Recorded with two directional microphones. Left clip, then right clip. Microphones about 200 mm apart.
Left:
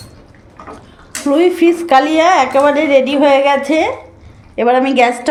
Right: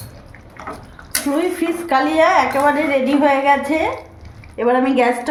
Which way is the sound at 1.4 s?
45° left (ahead or behind).